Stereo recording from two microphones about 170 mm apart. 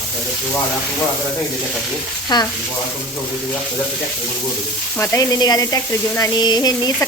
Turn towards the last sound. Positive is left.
turn(degrees=25)  # may be behind; listen again after turning